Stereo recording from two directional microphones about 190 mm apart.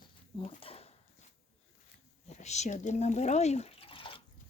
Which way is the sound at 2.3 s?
35° left (ahead or behind).